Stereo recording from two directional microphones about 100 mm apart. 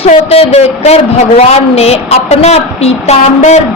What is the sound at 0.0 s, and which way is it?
A man's voice, 85° left.